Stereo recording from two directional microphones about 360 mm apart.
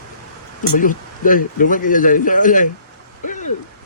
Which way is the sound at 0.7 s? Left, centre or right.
Left.